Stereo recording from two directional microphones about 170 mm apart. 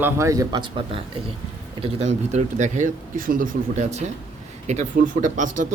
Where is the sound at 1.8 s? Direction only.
40° right (ahead or behind).